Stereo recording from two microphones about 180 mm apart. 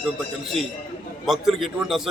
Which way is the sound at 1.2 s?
Centre (ahead or behind).